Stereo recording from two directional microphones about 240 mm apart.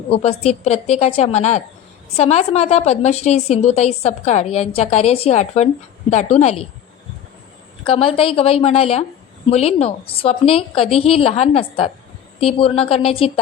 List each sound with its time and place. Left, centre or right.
0.1 s a woman's voice: left
7.9 s a woman's voice: left